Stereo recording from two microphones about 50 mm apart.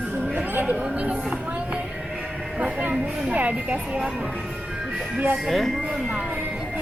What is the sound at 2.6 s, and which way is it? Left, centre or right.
Music, right.